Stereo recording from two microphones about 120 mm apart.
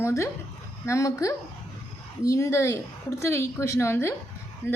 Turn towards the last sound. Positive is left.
turn(degrees=20)  # may be behind; listen again after turning